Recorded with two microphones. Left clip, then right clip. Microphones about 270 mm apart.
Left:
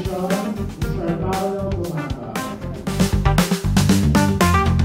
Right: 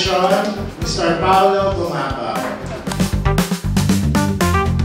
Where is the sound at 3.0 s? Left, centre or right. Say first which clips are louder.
Left 1 dB; centre.